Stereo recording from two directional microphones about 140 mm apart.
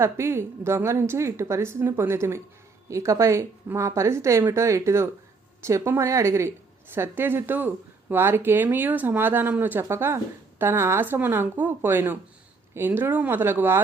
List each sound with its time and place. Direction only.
0.0 s a woman's voice: 20° right (ahead or behind)